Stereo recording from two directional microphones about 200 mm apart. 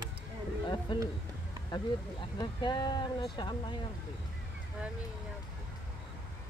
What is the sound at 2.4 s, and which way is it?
Speech, 25° left (ahead or behind).